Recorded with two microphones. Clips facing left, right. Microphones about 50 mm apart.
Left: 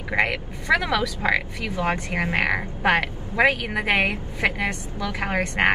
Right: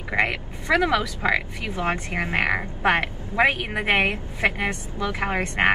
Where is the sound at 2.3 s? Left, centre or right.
Centre.